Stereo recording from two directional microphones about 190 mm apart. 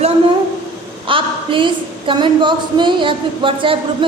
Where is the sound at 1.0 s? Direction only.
25° right (ahead or behind).